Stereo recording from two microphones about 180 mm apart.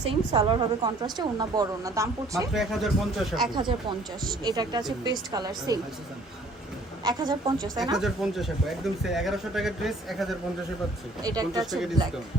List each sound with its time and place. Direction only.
0.0 s a woman's voice: 30° right (ahead or behind)
2.5 s speech: centre (ahead or behind)
3.4 s a woman's voice: 25° right (ahead or behind)
7.0 s a woman's voice: 25° right (ahead or behind)
7.9 s speech: centre (ahead or behind)
11.2 s a woman's voice: 20° right (ahead or behind)
11.6 s speech: centre (ahead or behind)